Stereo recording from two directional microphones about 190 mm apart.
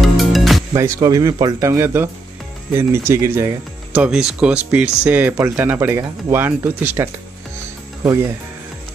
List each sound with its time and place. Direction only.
0.0 s music: centre (ahead or behind)
0.7 s speech: 15° right (ahead or behind)